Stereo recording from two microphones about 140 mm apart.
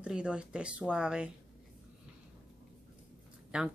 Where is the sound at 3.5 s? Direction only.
5° right (ahead or behind).